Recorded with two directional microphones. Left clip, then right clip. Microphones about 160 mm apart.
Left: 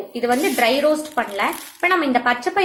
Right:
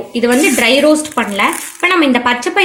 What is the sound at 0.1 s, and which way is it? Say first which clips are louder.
A woman's voice: right 8 dB; 50° right (ahead or behind).